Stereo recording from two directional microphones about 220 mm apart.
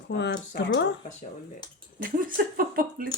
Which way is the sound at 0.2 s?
50° left (ahead or behind).